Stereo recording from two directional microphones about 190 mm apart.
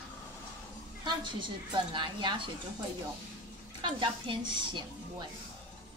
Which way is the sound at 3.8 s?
25° right (ahead or behind).